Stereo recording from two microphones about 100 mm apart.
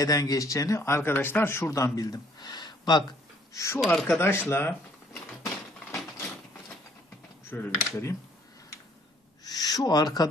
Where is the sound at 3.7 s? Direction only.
Centre (ahead or behind).